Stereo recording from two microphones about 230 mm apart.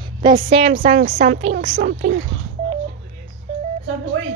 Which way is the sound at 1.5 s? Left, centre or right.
Right.